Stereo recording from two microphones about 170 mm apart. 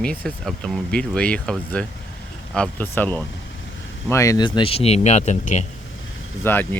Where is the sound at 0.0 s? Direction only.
5° left (ahead or behind); by 5.6 s 45° left (ahead or behind).